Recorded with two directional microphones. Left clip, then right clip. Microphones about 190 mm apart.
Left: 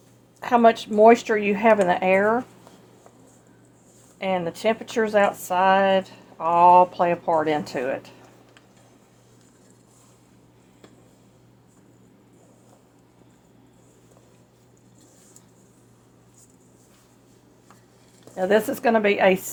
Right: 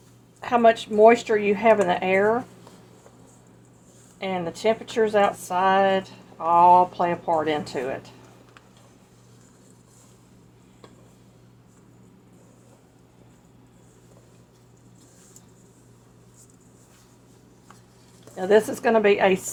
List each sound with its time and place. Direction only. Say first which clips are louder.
0.3 s speech: left 1 dB; 40° left (ahead or behind)
4.2 s speech: left 2 dB; 35° left (ahead or behind)
18.3 s speech: right 1 dB; 30° left (ahead or behind)